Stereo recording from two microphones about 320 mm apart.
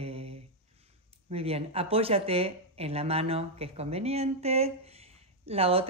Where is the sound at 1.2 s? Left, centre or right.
Centre.